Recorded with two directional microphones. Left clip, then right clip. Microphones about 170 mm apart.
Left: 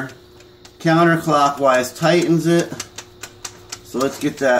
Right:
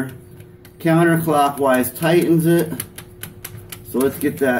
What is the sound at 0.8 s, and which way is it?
Speech, 20° left (ahead or behind).